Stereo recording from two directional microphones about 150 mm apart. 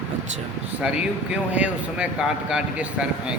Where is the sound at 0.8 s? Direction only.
5° right (ahead or behind).